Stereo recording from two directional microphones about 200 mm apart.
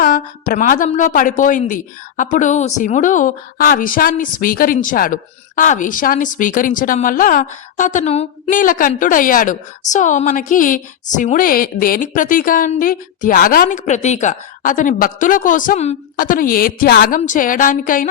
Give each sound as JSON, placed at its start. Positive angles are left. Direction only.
{"t": 0.0, "sound": "a woman's voice", "side_deg": 40}